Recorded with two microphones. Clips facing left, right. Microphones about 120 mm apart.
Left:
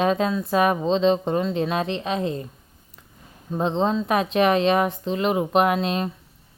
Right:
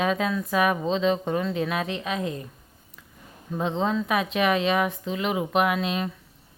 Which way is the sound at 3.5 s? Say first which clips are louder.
Left 3 dB; 30° left (ahead or behind).